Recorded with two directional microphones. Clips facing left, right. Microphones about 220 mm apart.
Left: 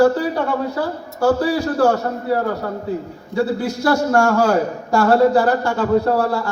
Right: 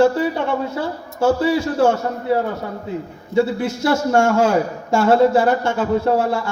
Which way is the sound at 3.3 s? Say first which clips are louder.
Right 2 dB; 20° right (ahead or behind).